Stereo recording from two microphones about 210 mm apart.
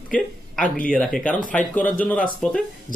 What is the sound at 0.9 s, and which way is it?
Speech, 5° left (ahead or behind).